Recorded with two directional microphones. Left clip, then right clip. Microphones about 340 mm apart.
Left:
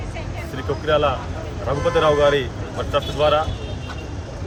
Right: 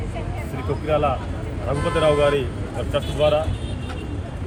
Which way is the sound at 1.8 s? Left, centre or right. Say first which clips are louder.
Left 2 dB; centre.